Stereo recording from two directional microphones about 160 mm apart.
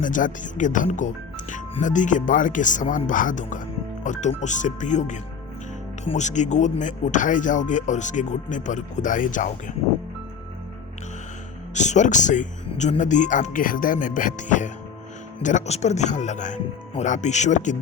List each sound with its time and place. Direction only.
0.0 s speech: 55° left (ahead or behind)
11.7 s speech: 45° left (ahead or behind)